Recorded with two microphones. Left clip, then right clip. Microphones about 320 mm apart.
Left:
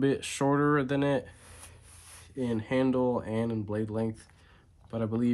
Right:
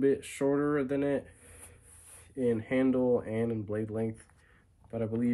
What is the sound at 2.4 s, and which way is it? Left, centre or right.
Speech, centre.